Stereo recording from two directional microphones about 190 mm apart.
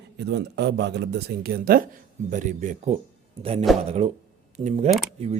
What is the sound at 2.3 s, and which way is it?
Speech, 40° right (ahead or behind).